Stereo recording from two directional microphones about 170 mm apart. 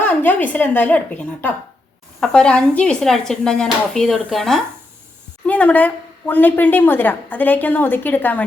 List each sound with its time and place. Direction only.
0.0 s a woman's voice: 10° left (ahead or behind)